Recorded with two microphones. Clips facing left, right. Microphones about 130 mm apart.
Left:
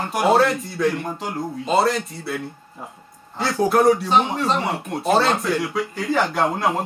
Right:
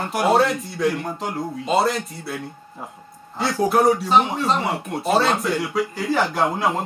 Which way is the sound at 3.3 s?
Centre (ahead or behind).